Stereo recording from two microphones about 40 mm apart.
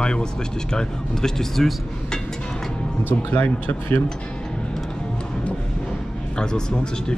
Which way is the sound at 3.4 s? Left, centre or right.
Left.